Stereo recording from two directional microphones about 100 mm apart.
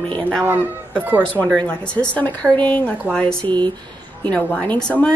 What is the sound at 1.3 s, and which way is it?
A woman's voice, 10° left (ahead or behind).